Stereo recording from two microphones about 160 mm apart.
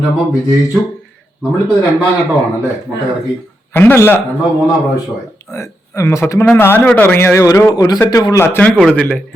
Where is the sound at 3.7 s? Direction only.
15° left (ahead or behind).